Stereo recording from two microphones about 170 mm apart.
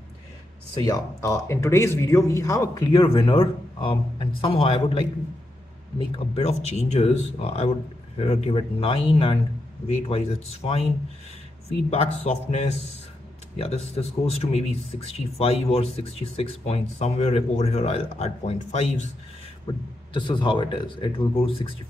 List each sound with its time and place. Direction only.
0.8 s speech: 20° left (ahead or behind); by 10.9 s 35° left (ahead or behind)
11.9 s speech: 35° left (ahead or behind)
19.7 s speech: 30° left (ahead or behind)